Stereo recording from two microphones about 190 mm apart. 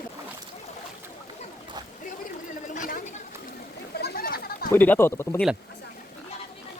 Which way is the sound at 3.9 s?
55° left (ahead or behind).